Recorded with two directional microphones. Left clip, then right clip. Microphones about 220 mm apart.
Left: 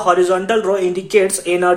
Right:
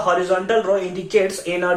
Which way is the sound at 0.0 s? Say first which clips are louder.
Left 4 dB; 45° left (ahead or behind).